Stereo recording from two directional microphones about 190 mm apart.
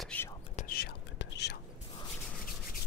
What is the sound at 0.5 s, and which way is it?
Whispering, 50° left (ahead or behind).